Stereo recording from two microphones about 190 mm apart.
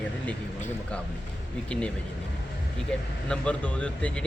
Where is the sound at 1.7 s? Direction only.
5° left (ahead or behind).